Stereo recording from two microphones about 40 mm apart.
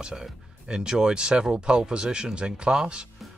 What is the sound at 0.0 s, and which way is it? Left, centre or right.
Speech, centre.